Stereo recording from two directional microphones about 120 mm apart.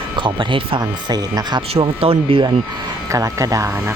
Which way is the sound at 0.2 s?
45° right (ahead or behind).